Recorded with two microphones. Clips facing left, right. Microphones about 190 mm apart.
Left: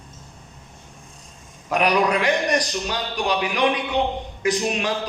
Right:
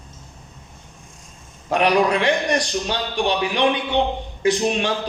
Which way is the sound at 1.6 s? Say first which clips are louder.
Right 2 dB; 30° right (ahead or behind).